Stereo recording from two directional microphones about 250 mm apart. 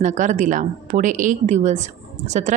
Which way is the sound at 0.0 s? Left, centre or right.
Right.